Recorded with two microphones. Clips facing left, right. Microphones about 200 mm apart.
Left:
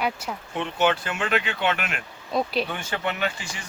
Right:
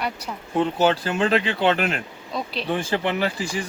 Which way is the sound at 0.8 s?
35° right (ahead or behind).